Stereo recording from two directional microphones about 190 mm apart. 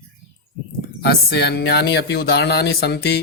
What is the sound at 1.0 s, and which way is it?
Speech, 55° left (ahead or behind).